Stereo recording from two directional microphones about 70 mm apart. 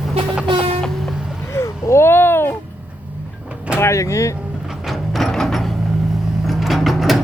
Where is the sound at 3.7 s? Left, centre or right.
Left.